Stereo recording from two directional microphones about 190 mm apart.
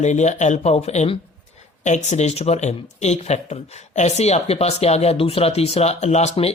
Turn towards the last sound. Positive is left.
turn(degrees=35)  # may be behind; listen again after turning